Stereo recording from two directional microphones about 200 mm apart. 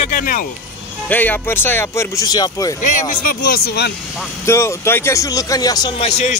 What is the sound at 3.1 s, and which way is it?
Speech, 45° left (ahead or behind).